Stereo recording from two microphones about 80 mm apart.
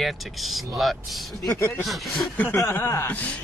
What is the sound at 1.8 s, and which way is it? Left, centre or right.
Speech, centre.